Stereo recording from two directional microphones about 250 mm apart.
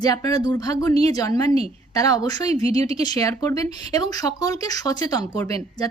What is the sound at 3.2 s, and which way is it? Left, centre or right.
A woman's voice, centre.